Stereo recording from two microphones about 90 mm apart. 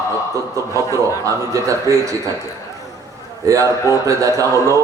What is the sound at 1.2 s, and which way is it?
A man's voice, 35° right (ahead or behind).